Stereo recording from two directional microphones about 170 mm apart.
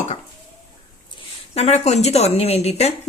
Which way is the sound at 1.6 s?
40° left (ahead or behind).